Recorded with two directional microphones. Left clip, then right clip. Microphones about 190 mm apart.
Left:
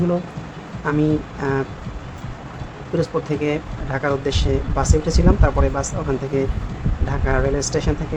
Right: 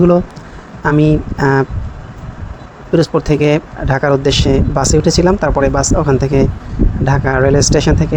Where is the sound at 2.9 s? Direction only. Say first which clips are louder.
Right 9 dB; 45° right (ahead or behind).